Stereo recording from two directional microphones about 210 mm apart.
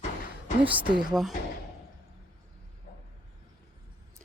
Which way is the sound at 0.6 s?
25° right (ahead or behind).